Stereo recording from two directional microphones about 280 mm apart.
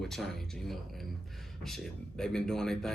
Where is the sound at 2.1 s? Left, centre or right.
Centre.